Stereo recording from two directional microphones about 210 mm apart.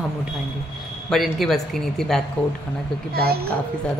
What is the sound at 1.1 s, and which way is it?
Speech, centre (ahead or behind).